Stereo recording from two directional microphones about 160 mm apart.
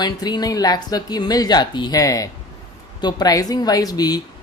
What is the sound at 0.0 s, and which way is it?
Speech, 25° left (ahead or behind).